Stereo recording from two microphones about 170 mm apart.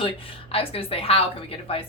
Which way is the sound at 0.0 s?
35° left (ahead or behind).